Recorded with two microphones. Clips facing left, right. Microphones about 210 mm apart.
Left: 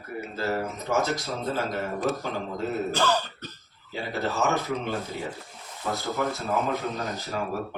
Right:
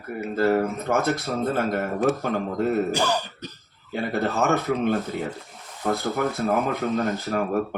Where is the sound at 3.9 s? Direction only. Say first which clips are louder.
Right 5 dB; 55° right (ahead or behind).